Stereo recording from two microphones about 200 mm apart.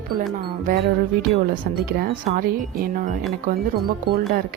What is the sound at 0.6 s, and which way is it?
Speech, 45° right (ahead or behind).